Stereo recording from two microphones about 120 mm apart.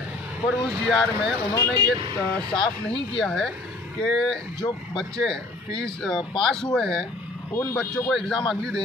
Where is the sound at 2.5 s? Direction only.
40° left (ahead or behind).